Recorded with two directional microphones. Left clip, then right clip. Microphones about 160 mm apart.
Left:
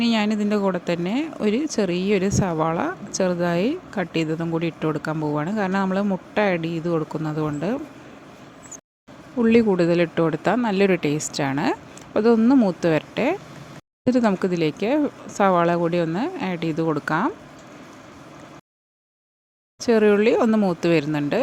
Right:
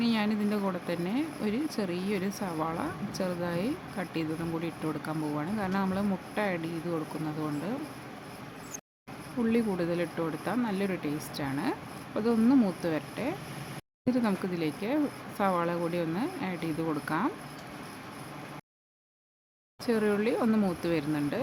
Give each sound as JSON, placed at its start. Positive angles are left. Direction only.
{"t": 0.0, "sound": "speech", "side_deg": 45}
{"t": 9.4, "sound": "speech", "side_deg": 50}
{"t": 19.8, "sound": "speech", "side_deg": 50}